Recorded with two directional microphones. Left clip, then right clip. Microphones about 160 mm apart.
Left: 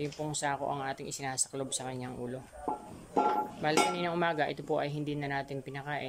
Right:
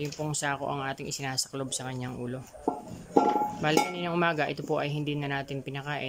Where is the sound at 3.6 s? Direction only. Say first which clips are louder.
Left 2 dB; 5° right (ahead or behind).